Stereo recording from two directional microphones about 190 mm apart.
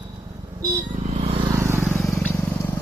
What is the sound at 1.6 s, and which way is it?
Vehicle, 15° right (ahead or behind).